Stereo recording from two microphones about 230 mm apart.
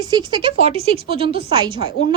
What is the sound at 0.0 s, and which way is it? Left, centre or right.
A woman's voice, centre.